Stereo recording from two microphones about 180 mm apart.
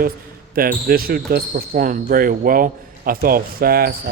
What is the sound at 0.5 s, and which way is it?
Speech, 55° right (ahead or behind).